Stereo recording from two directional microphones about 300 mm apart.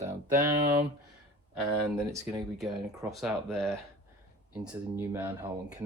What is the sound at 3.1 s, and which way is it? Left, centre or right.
Speech, centre.